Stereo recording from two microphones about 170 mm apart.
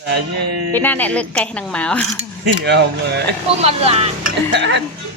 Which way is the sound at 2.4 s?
80° right.